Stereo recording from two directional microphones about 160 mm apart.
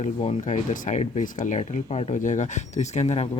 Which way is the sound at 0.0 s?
45° left (ahead or behind).